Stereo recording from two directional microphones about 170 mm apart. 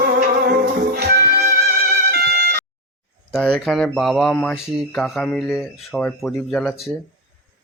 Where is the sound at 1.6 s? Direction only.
70° right (ahead or behind).